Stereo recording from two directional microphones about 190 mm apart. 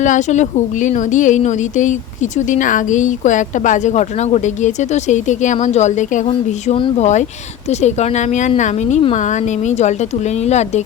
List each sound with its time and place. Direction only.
0.0 s speech: 40° left (ahead or behind)